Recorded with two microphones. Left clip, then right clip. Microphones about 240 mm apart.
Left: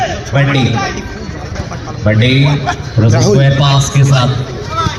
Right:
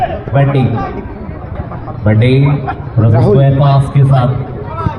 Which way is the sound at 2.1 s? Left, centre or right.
Centre.